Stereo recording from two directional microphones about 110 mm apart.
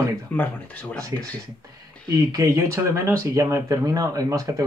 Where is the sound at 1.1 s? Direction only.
30° right (ahead or behind).